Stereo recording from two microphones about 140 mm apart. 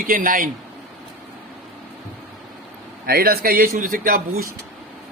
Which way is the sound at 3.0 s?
90° right.